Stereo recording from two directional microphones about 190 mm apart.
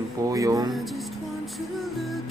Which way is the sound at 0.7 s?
Centre (ahead or behind).